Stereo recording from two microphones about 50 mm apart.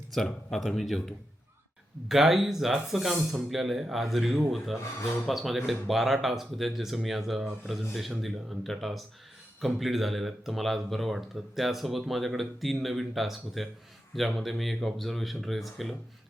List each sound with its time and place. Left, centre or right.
0.5 s speech: centre
2.0 s speech: centre